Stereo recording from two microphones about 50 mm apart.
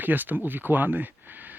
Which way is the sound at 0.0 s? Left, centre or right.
Right.